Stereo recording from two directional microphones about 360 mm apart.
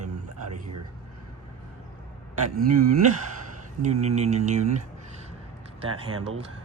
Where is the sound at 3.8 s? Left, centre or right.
Centre.